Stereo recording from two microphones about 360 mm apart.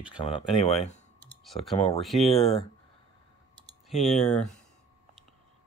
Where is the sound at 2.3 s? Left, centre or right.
Centre.